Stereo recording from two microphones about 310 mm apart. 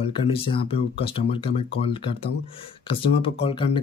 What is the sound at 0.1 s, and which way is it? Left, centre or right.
Speech, centre.